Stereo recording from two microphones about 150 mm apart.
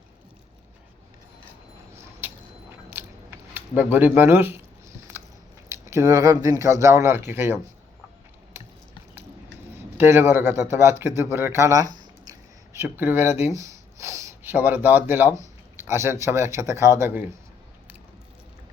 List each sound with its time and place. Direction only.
2.9 s a sound: 15° right (ahead or behind)
3.9 s speech: 10° right (ahead or behind)
5.7 s speech: 20° right (ahead or behind)
9.7 s a man's voice: 15° right (ahead or behind)
12.2 s a sound: 20° right (ahead or behind)
15.8 s speech: 15° right (ahead or behind)